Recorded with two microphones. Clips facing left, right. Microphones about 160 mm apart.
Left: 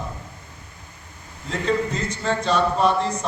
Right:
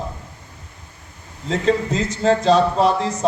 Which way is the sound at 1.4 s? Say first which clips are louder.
Right 4 dB; 90° right.